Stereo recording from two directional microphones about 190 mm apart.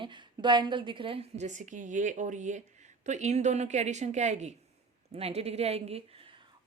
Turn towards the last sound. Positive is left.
turn(degrees=-35)  # may be behind; listen again after turning